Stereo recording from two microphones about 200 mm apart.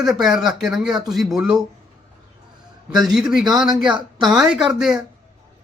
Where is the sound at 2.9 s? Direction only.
Centre (ahead or behind).